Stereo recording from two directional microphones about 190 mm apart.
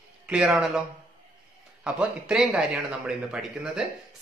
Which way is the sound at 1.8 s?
5° right (ahead or behind).